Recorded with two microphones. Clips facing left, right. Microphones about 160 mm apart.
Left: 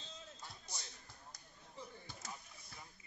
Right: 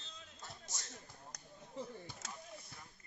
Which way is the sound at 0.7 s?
80° right.